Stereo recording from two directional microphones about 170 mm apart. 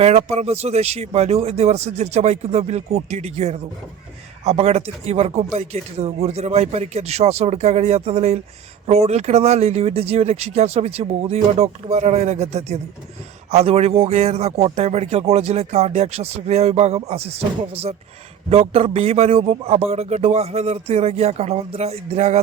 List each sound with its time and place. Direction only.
0.0 s a man's voice: 40° right (ahead or behind)